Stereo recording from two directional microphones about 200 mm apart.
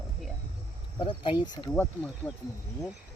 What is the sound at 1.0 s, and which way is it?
Speech, 25° left (ahead or behind).